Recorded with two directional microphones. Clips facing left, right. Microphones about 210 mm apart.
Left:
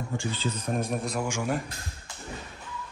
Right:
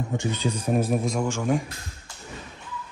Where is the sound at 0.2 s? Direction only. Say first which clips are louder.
Right 5 dB; 15° right (ahead or behind); by 1.7 s 5° left (ahead or behind).